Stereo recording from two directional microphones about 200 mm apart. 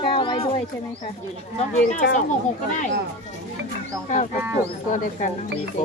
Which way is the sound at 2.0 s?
55° left (ahead or behind).